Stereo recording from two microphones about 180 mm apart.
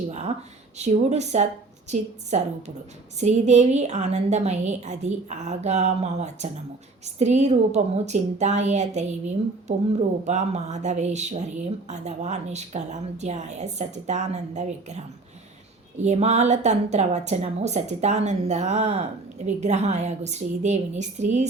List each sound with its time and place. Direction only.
0.1 s a woman's voice: 40° right (ahead or behind)